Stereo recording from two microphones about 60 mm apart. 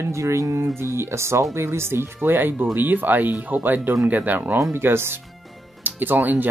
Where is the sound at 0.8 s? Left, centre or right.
Right.